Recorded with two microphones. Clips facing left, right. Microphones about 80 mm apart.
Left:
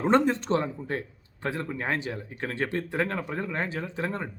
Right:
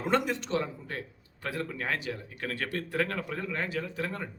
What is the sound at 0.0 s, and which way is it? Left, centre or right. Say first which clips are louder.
Speech: left 6 dB; left.